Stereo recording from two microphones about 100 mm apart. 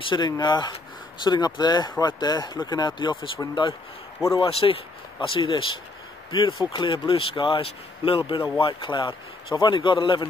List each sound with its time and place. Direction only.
0.0 s speech: 50° left (ahead or behind)
4.4 s speech: 65° left (ahead or behind)
5.3 s speech: 55° left (ahead or behind)
6.3 s speech: 45° left (ahead or behind)
6.9 s speech: 65° left (ahead or behind)